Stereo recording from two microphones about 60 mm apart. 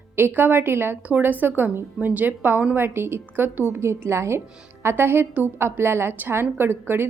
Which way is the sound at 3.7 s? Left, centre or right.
Right.